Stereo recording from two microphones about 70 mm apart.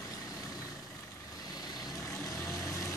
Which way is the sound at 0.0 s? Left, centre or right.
Left.